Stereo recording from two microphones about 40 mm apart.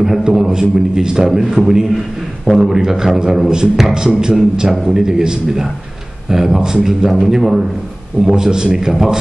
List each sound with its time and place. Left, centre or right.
0.0 s a man's voice: centre